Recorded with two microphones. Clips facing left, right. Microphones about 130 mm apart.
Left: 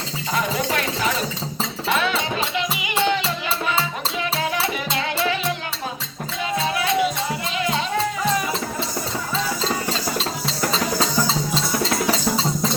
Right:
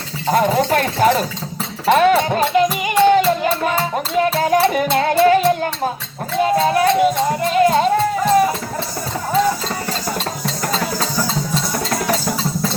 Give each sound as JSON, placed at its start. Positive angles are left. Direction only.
{"t": 0.3, "sound": "a sound", "side_deg": -50}
{"t": 1.9, "sound": "music", "side_deg": -50}
{"t": 10.2, "sound": "music", "side_deg": -50}